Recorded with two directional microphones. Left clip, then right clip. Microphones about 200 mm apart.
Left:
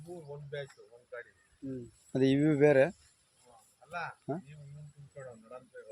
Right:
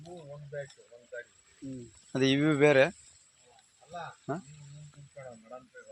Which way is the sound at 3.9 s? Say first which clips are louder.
Even; 15° right (ahead or behind).